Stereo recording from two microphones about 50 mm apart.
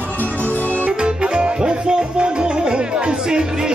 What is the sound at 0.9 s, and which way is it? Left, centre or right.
Music, centre.